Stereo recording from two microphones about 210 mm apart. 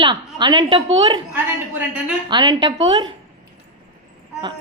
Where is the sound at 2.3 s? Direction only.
20° right (ahead or behind).